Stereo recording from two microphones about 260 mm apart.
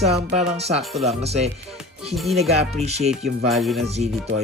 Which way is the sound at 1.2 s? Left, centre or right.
Right.